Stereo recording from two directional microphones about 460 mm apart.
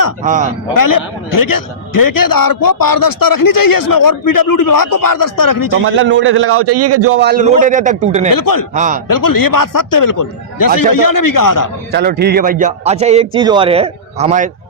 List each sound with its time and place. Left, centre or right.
0.2 s a man's voice: centre
0.7 s a man's voice: left
5.8 s a man's voice: right
8.3 s a man's voice: left
8.7 s a man's voice: centre
9.0 s a man's voice: left
11.9 s a man's voice: right